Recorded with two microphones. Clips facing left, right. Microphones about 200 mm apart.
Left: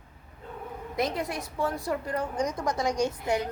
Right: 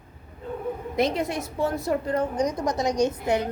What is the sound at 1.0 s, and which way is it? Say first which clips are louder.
A woman's voice: right 5 dB; 25° right (ahead or behind).